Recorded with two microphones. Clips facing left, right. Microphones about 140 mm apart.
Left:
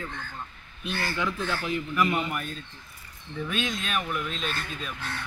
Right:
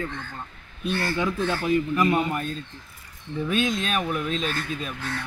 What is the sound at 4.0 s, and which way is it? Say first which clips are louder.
Speech: right 5 dB; 35° right (ahead or behind).